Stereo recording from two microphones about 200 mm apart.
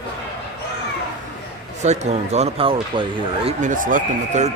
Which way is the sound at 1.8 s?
35° right (ahead or behind).